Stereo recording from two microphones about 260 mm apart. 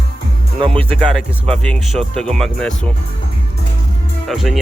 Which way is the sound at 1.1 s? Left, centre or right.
Centre.